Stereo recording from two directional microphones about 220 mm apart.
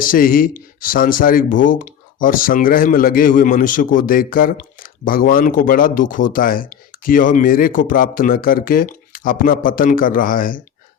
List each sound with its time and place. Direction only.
0.0 s speech: 40° left (ahead or behind)